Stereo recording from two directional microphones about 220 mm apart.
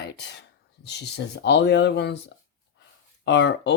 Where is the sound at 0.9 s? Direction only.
50° left (ahead or behind).